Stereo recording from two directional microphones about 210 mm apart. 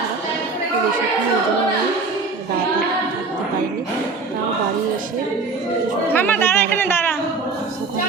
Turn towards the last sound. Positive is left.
turn(degrees=10)  # may be behind; listen again after turning